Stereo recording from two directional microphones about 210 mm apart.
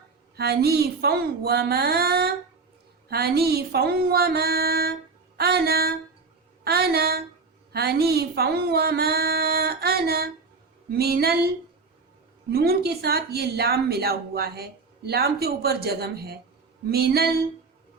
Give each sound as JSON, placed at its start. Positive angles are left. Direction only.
{"t": 0.3, "sound": "a woman's voice", "side_deg": -50}